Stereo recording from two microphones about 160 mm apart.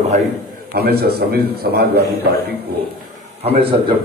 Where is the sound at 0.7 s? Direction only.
80° right.